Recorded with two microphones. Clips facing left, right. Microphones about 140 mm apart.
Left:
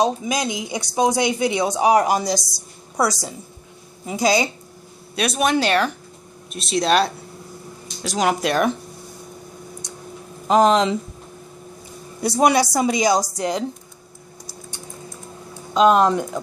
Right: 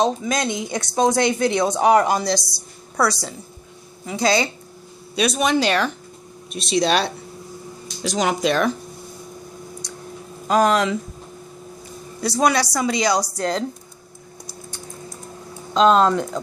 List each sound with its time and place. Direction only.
0.0 s speech: 10° left (ahead or behind)
5.1 s speech: 5° left (ahead or behind)
10.4 s speech: 20° left (ahead or behind)
12.2 s speech: 20° left (ahead or behind)
15.7 s speech: 10° left (ahead or behind)